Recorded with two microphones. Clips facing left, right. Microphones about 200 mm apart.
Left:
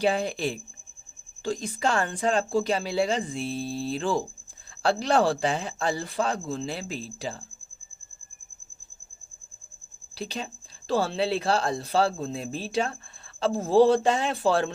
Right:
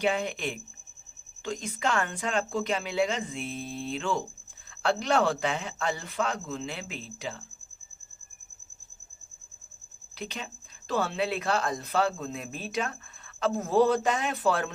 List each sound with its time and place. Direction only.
0.0 s speech: 35° left (ahead or behind)
10.2 s speech: 35° left (ahead or behind)